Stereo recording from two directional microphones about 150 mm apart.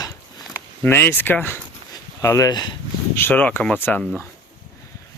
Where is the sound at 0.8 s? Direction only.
15° left (ahead or behind).